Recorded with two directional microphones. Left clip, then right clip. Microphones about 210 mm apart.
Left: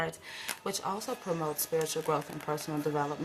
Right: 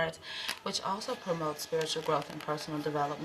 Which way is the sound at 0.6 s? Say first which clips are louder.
Left 1 dB; 50° left (ahead or behind).